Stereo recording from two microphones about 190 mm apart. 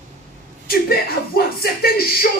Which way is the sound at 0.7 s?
55° left (ahead or behind).